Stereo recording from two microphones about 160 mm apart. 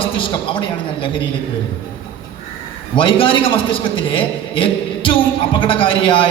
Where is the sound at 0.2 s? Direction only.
35° left (ahead or behind).